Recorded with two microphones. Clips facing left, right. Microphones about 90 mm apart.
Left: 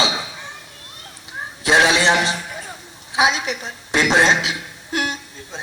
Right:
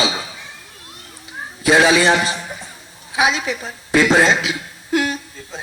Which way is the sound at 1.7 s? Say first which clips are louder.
Right 2 dB; 20° left (ahead or behind).